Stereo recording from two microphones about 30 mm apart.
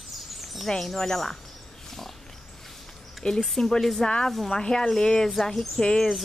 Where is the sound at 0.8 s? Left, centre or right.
Centre.